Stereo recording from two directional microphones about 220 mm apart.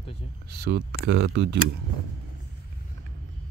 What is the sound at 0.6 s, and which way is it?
Speech, 50° right (ahead or behind).